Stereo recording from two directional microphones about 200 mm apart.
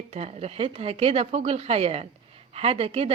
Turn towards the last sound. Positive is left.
turn(degrees=-30)  # may be behind; listen again after turning